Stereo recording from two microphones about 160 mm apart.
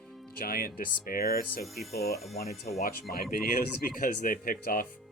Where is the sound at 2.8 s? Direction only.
65° left (ahead or behind).